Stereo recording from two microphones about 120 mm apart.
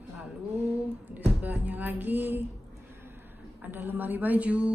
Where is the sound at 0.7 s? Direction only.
15° right (ahead or behind).